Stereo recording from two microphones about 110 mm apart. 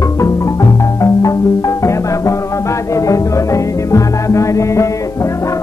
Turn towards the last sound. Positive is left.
turn(degrees=25)  # may be behind; listen again after turning